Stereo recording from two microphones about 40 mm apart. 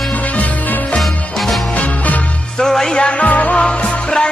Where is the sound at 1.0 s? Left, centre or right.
Centre.